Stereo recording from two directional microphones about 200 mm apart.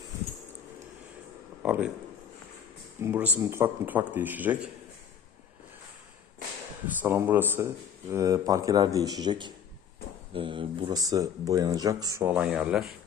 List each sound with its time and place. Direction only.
1.6 s speech: 5° right (ahead or behind)
3.0 s a man's voice: 10° right (ahead or behind)
6.8 s a man's voice: 10° right (ahead or behind)
12.3 s speech: 5° right (ahead or behind)